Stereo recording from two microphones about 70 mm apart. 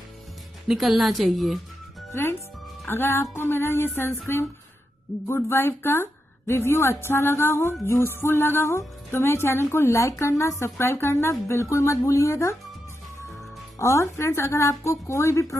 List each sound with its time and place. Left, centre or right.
0.7 s a woman's voice: centre
2.9 s a woman's voice: left
13.7 s a woman's voice: left